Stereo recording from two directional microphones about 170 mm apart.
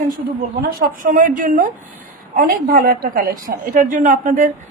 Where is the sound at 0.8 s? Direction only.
55° right (ahead or behind).